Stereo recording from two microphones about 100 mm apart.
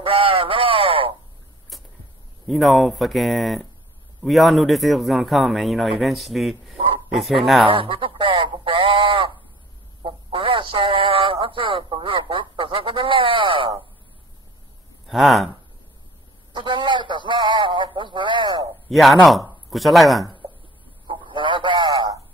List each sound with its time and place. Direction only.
0.0 s radio: 60° right (ahead or behind)
1.7 s a sound: centre (ahead or behind)
2.4 s a man's voice: centre (ahead or behind)
7.6 s radio: 65° right (ahead or behind)
10.0 s speech: 60° right (ahead or behind)
15.0 s a man's voice: centre (ahead or behind)
16.5 s a man's voice: 50° right (ahead or behind)
18.9 s a man's voice: centre (ahead or behind)
21.1 s a sound: 55° right (ahead or behind)